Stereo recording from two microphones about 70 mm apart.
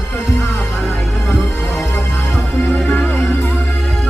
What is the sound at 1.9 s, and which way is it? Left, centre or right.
Music, left.